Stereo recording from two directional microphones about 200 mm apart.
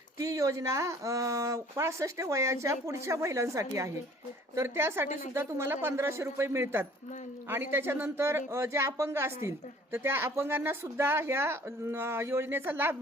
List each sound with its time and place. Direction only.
0.2 s speech: 15° right (ahead or behind)
5.0 s a woman's voice: 35° left (ahead or behind)
5.3 s speech: 10° right (ahead or behind)